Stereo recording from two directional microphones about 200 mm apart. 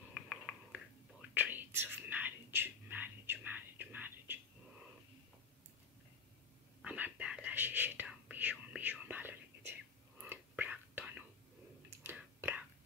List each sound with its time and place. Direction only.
0.1 s a sound: centre (ahead or behind)
1.3 s whispering: 10° right (ahead or behind)
6.8 s whispering: 5° right (ahead or behind)